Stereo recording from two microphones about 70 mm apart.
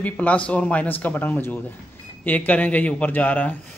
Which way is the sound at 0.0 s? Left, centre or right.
Left.